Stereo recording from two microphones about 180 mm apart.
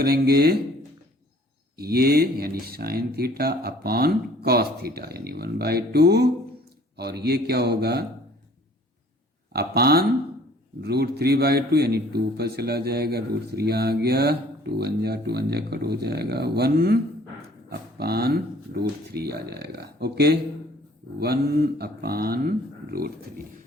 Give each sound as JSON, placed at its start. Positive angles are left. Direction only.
{"t": 0.0, "sound": "a man's voice", "side_deg": -60}
{"t": 1.8, "sound": "a man's voice", "side_deg": -60}
{"t": 9.5, "sound": "a man's voice", "side_deg": -60}